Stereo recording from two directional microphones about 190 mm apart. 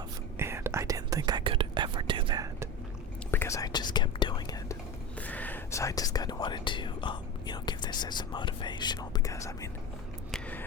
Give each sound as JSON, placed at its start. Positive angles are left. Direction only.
{"t": 0.3, "sound": "whispering", "side_deg": -15}
{"t": 3.3, "sound": "whispering", "side_deg": 15}
{"t": 5.2, "sound": "whispering", "side_deg": 10}
{"t": 10.3, "sound": "a sound", "side_deg": 5}